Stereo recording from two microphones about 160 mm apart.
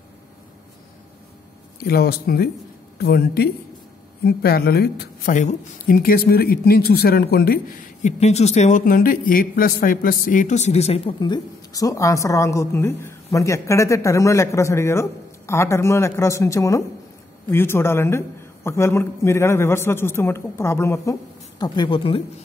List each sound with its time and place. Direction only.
1.9 s speech: 75° left (ahead or behind)
5.3 s a man's voice: 50° left (ahead or behind)
5.9 s speech: 65° left (ahead or behind)
8.0 s a man's voice: 45° left (ahead or behind)
11.1 s a woman's voice: 25° left (ahead or behind)